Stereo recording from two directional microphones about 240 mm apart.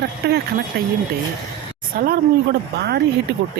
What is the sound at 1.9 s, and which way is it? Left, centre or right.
Speech, right.